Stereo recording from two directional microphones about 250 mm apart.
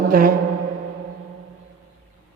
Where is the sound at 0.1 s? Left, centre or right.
Right.